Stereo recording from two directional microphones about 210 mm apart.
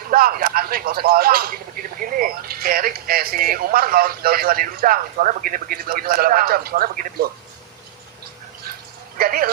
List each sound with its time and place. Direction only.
0.1 s speech: 45° right (ahead or behind)
9.1 s speech: 45° right (ahead or behind)